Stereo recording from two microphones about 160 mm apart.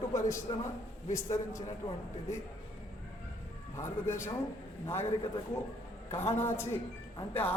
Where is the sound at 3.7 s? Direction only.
15° left (ahead or behind).